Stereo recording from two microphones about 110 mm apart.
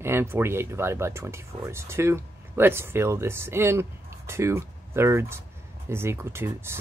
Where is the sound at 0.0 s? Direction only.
20° right (ahead or behind).